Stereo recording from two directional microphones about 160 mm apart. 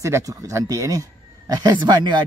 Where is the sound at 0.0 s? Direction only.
20° right (ahead or behind).